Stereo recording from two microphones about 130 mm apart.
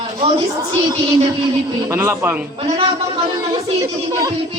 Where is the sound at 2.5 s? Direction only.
45° right (ahead or behind).